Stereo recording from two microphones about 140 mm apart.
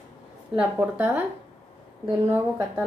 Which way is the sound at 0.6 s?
15° right (ahead or behind).